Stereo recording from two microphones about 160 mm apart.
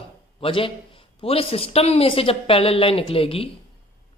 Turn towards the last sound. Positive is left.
turn(degrees=35)  # may be behind; listen again after turning